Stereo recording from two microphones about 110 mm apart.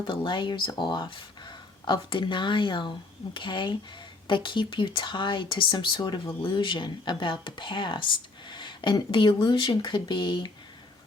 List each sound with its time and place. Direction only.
0.0 s speech: 45° left (ahead or behind)